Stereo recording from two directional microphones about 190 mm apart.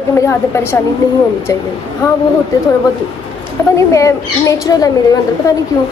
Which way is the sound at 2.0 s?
15° left (ahead or behind).